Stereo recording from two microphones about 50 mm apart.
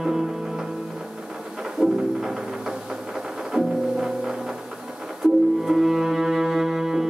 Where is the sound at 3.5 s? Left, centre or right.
Centre.